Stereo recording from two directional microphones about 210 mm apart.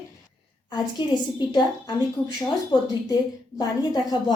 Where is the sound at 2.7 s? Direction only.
20° left (ahead or behind).